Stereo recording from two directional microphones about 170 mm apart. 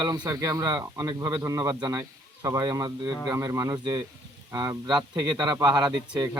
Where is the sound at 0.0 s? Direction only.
25° right (ahead or behind).